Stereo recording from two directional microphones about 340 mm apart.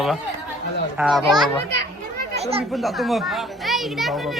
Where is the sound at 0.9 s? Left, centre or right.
Centre.